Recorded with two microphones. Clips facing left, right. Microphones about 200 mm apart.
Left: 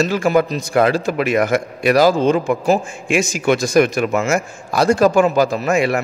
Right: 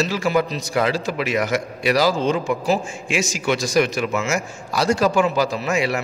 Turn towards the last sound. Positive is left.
turn(degrees=50)  # may be behind; listen again after turning